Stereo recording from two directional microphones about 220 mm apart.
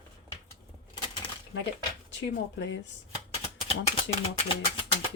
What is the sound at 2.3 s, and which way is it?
Speech, 55° left (ahead or behind).